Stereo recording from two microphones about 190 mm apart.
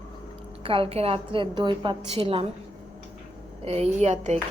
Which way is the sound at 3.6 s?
30° right (ahead or behind).